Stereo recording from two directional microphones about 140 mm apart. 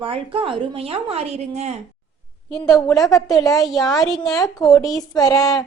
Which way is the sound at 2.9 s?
25° left (ahead or behind).